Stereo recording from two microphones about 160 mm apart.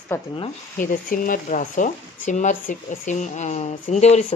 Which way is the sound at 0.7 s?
60° left (ahead or behind).